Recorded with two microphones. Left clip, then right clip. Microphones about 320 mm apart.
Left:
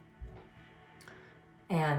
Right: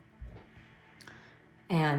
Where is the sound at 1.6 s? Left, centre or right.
Right.